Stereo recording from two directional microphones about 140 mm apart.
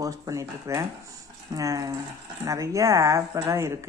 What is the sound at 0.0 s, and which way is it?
Speech, 25° right (ahead or behind).